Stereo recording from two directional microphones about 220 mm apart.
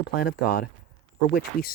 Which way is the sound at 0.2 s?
40° left (ahead or behind).